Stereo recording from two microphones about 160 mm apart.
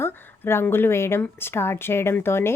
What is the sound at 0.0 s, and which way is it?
A woman's voice, 10° left (ahead or behind).